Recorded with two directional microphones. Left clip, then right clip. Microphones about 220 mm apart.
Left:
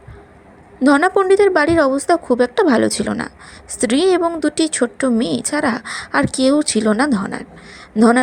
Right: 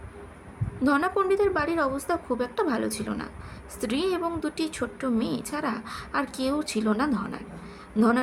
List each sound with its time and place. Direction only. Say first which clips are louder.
0.9 s a woman's voice: left 11 dB; 30° left (ahead or behind)